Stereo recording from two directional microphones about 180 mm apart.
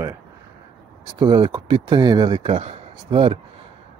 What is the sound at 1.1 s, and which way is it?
Speech, 25° right (ahead or behind).